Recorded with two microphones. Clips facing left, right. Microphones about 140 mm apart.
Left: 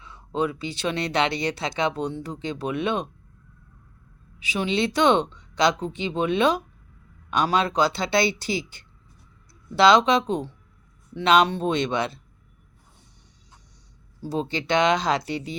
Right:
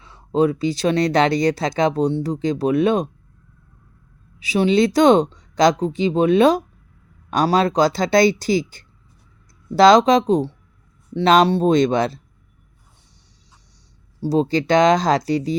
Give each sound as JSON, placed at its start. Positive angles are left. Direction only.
{"t": 0.0, "sound": "speech", "side_deg": -35}
{"t": 4.4, "sound": "speech", "side_deg": -40}
{"t": 14.3, "sound": "speech", "side_deg": -40}